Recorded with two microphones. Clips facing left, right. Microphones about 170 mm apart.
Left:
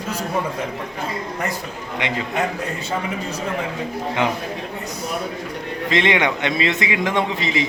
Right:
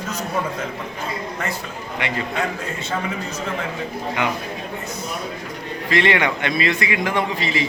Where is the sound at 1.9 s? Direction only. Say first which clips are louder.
Left 1 dB; 20° left (ahead or behind).